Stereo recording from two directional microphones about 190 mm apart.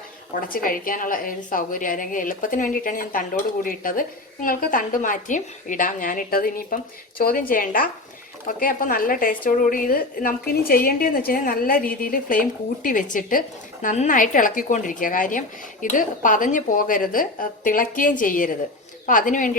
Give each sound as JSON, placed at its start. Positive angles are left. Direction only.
{"t": 0.4, "sound": "a woman's voice", "side_deg": 45}